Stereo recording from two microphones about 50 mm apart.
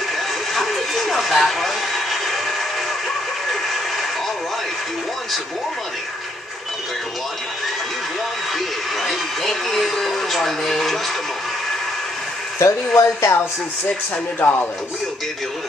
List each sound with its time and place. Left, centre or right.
0.6 s a sound: centre
8.5 s speech: centre
12.5 s speech: left
13.8 s speech: left